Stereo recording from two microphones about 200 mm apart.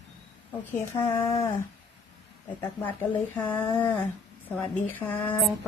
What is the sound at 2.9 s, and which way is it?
A woman's voice, 5° left (ahead or behind).